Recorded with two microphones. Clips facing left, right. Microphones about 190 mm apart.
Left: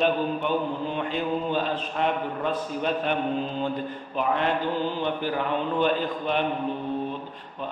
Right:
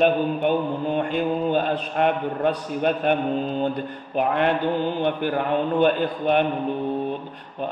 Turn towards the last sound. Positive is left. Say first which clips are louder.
# right 5 dB
turn(degrees=-50)  # may be behind; listen again after turning